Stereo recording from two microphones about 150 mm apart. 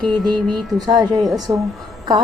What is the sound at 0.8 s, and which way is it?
Speech, 25° right (ahead or behind).